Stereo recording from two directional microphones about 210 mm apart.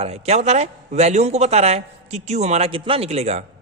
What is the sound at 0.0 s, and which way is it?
A man's voice, 30° right (ahead or behind).